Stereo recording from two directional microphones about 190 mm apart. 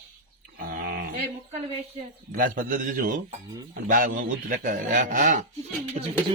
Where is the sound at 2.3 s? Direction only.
45° right (ahead or behind).